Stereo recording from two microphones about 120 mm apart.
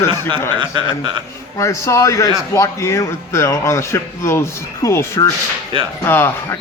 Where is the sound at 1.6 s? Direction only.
25° left (ahead or behind).